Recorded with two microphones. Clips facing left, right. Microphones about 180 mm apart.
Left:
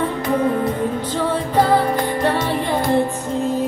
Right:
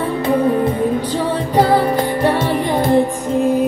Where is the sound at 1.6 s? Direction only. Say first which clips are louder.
Right 3 dB; 10° right (ahead or behind).